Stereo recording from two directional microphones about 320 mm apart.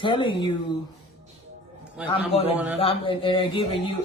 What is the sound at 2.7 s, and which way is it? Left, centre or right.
Speech, centre.